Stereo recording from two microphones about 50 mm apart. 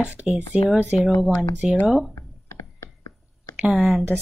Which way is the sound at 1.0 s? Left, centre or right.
Centre.